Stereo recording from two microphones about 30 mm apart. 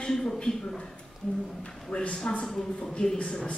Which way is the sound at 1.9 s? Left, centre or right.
Left.